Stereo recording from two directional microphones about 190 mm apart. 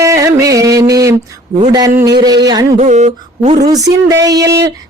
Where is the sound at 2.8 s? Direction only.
40° right (ahead or behind).